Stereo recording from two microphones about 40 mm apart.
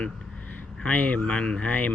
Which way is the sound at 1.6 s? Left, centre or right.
Left.